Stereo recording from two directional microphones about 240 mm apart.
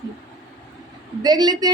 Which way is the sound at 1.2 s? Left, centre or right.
Centre.